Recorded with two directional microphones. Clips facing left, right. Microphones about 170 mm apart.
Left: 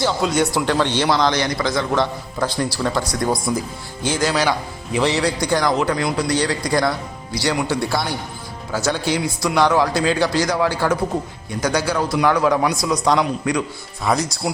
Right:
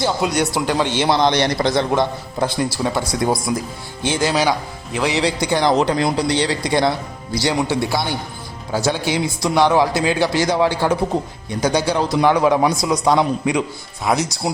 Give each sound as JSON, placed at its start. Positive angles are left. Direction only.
{"t": 0.0, "sound": "a man's voice", "side_deg": -15}
{"t": 2.8, "sound": "a man's voice", "side_deg": -10}
{"t": 4.9, "sound": "a man's voice", "side_deg": 0}
{"t": 5.1, "sound": "a man's voice", "side_deg": -20}
{"t": 8.8, "sound": "a man's voice", "side_deg": -15}